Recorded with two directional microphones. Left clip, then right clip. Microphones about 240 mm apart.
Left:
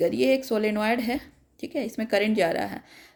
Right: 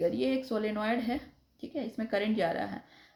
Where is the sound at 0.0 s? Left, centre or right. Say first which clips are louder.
Left 8 dB; left.